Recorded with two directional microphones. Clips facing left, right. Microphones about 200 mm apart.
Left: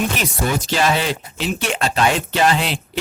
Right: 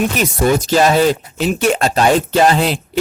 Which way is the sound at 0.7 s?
40° right (ahead or behind).